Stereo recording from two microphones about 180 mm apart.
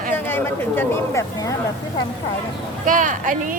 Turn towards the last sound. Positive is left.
turn(degrees=-45)  # may be behind; listen again after turning